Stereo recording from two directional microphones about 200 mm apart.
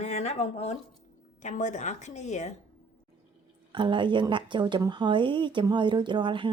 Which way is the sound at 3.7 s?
25° right (ahead or behind).